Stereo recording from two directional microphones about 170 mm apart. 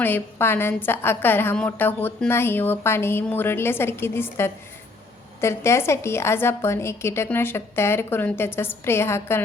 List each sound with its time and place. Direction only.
0.0 s a woman's voice: 10° left (ahead or behind)